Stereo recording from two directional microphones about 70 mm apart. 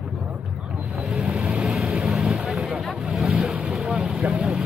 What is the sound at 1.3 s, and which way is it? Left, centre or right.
Vehicle, centre.